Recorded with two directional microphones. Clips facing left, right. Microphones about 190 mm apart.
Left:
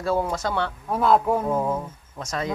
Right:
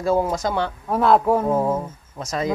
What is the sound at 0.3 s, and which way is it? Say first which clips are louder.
Speech: right 3 dB; 15° right (ahead or behind).